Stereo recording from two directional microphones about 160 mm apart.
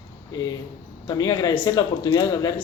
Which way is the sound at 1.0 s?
25° left (ahead or behind).